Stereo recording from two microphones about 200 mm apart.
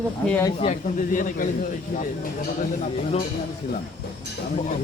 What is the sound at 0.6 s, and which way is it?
Speech, 35° left (ahead or behind).